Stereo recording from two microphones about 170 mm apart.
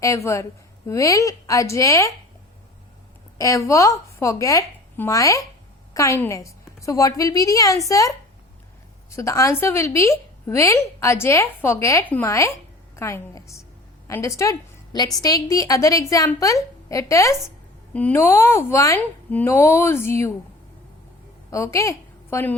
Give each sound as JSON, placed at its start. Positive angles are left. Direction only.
{"t": 0.0, "sound": "a woman's voice", "side_deg": 15}
{"t": 3.3, "sound": "a woman's voice", "side_deg": 20}
{"t": 21.5, "sound": "a woman's voice", "side_deg": 20}